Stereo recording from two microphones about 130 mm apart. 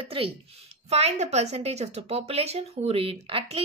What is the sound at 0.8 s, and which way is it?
A woman's voice, 55° right (ahead or behind).